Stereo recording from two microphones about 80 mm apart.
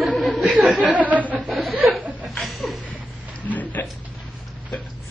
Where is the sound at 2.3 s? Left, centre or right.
Centre.